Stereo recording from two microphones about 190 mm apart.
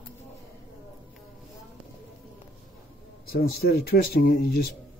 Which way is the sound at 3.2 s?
50° left (ahead or behind).